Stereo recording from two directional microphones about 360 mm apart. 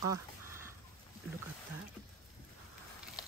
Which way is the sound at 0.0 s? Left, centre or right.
Centre.